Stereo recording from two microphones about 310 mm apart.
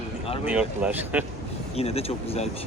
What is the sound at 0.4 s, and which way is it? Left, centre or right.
Speech, centre.